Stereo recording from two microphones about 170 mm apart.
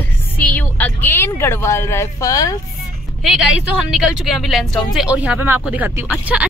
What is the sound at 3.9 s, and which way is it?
Speech, centre (ahead or behind).